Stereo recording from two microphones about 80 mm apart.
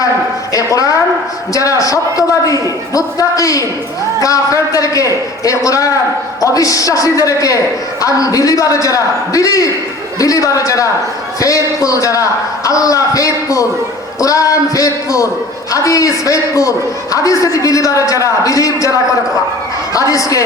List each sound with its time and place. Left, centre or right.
0.5 s a man's voice: left